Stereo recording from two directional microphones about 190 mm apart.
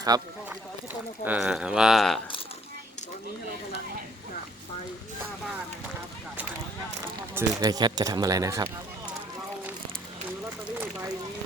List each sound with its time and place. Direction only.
0.1 s speech: 20° right (ahead or behind)
1.2 s speech: 5° right (ahead or behind)
7.3 s speech: 20° right (ahead or behind)